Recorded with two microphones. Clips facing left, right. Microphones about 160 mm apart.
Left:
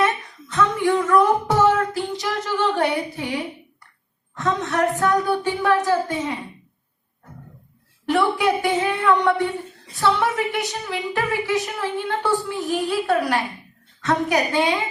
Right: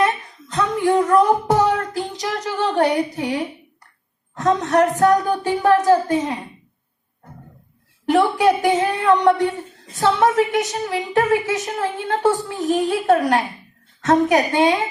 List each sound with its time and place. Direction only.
0.5 s child singing: 40° right (ahead or behind)
4.4 s speech: 40° right (ahead or behind)
8.1 s speech: 40° right (ahead or behind)